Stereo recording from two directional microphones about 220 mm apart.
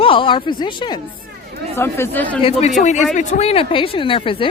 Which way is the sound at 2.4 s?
30° left (ahead or behind).